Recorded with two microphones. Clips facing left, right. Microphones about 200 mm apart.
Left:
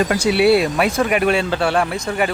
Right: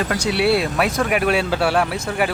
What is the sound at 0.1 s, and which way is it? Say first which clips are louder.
Speech: left 3 dB; 5° left (ahead or behind).